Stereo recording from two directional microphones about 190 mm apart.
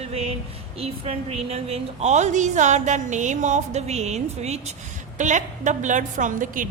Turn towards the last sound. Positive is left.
turn(degrees=-45)  # may be behind; listen again after turning